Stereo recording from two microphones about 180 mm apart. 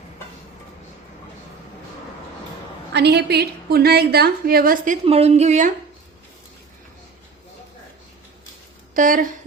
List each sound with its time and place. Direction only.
2.9 s a woman's voice: 65° right (ahead or behind); by 4.9 s 50° right (ahead or behind)
5.0 s a woman's voice: 35° right (ahead or behind)
9.0 s speech: 50° right (ahead or behind)